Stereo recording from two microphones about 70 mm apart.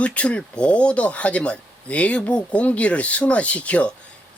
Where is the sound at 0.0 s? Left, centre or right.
Centre.